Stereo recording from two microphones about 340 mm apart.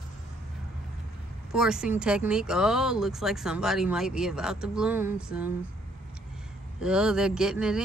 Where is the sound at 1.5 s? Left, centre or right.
Centre.